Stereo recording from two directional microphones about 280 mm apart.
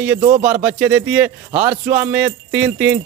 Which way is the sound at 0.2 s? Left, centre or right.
Right.